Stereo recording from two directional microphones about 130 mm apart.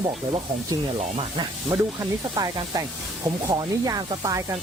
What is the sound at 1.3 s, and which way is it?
Speech, 30° right (ahead or behind).